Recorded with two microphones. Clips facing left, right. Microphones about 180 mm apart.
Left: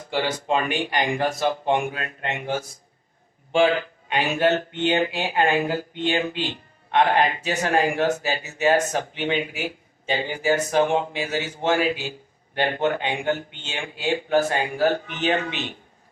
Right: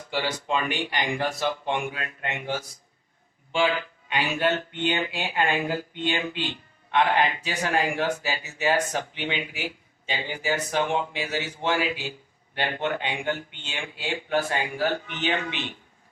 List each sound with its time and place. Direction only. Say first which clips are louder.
0.1 s speech: left 4 dB; 50° left (ahead or behind)
3.5 s speech: left 5 dB; 45° left (ahead or behind)